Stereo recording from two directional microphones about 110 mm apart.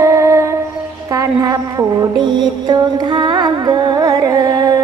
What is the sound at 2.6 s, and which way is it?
Music, 40° right (ahead or behind).